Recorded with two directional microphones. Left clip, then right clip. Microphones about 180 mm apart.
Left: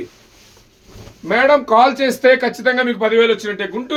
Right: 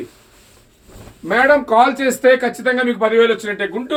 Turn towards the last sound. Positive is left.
turn(degrees=35)  # may be behind; listen again after turning